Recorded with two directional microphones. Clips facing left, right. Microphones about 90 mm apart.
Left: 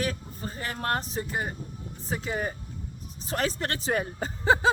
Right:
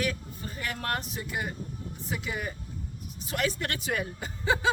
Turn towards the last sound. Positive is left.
turn(degrees=35)  # may be behind; listen again after turning